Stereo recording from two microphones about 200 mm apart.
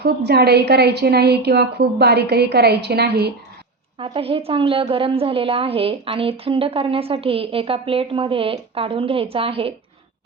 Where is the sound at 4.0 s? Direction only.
30° right (ahead or behind).